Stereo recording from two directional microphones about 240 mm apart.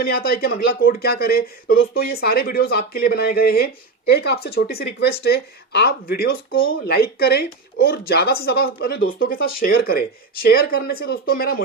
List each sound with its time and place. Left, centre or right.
0.0 s speech: left